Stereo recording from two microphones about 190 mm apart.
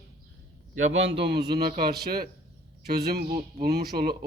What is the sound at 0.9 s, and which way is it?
A man's voice, 75° right (ahead or behind).